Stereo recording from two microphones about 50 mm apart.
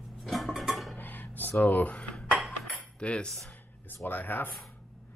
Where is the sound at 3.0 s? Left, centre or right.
Left.